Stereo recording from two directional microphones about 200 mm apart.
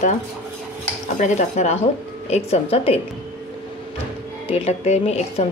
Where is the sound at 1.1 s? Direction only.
35° left (ahead or behind).